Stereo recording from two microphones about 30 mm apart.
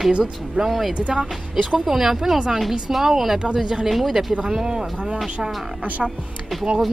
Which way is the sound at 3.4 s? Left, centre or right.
Right.